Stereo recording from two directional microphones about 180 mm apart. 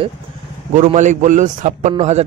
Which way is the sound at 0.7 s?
40° right (ahead or behind).